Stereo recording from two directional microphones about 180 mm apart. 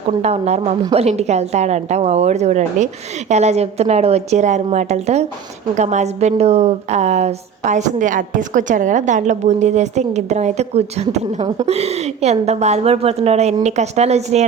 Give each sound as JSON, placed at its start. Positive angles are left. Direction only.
{"t": 0.2, "sound": "a woman's voice", "side_deg": -35}